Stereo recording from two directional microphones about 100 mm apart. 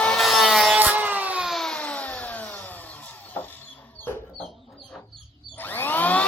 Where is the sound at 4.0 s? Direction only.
20° left (ahead or behind).